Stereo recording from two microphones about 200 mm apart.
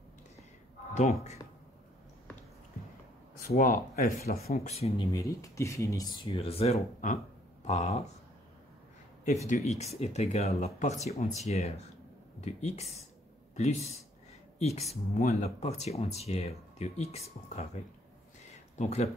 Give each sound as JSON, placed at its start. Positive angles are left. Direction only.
{"t": 3.4, "sound": "speech", "side_deg": 45}
{"t": 4.4, "sound": "speech", "side_deg": 30}
{"t": 9.5, "sound": "speech", "side_deg": 35}
{"t": 18.8, "sound": "speech", "side_deg": 35}